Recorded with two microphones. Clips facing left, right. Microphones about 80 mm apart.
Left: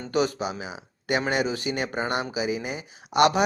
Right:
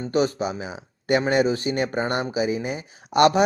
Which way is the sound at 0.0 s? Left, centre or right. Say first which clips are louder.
Right 3 dB; right.